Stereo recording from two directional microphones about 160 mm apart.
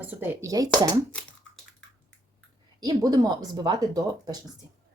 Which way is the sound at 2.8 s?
25° right (ahead or behind).